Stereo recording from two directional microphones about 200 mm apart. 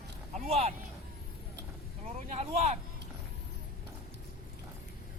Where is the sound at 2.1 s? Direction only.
35° right (ahead or behind).